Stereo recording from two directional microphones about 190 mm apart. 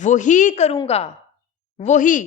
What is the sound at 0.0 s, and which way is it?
A woman's voice, 40° left (ahead or behind).